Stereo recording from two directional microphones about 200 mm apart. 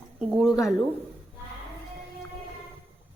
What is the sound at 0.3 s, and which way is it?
Speech, 5° right (ahead or behind).